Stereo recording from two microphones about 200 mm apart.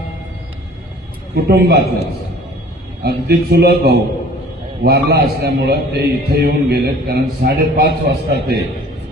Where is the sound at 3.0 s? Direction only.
50° right (ahead or behind).